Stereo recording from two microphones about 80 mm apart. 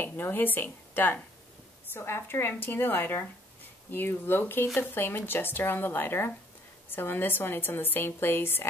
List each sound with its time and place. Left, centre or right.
0.0 s a woman's voice: left